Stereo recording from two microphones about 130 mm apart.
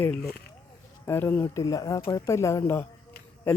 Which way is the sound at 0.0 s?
5° left (ahead or behind).